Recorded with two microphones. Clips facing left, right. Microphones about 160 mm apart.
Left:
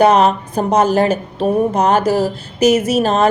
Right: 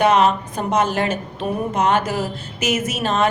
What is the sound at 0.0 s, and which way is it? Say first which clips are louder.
A woman's voice: left 4 dB; 35° left (ahead or behind).